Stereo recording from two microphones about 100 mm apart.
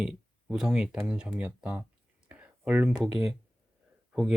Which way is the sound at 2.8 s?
5° right (ahead or behind).